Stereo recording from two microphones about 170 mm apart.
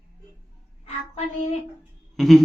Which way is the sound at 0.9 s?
40° left (ahead or behind).